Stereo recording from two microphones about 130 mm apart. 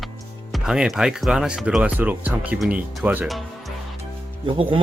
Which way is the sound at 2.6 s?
Centre (ahead or behind).